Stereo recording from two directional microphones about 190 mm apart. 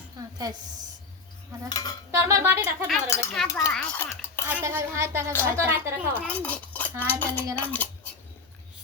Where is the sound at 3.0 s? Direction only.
5° left (ahead or behind).